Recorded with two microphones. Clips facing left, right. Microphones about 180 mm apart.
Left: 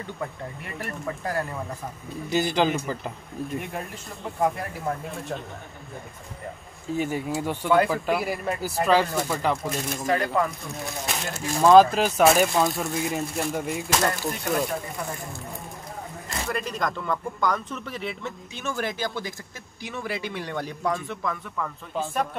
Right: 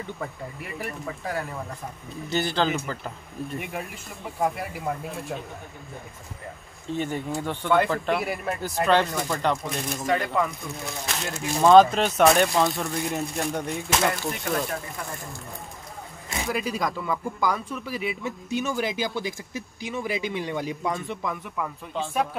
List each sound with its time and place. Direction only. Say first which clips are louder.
0.0 s speech: left 1 dB; 5° right (ahead or behind)
2.3 s speech: left 2 dB; 15° left (ahead or behind)
3.5 s speech: even; 5° right (ahead or behind)
6.9 s speech: left 2 dB; 5° left (ahead or behind)
16.3 s speech: right 2 dB; 5° right (ahead or behind)
18.6 s speech: right 1 dB; 15° right (ahead or behind)
21.9 s speech: even; centre (ahead or behind)